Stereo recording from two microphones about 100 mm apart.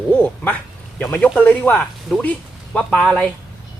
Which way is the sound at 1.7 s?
5° left (ahead or behind).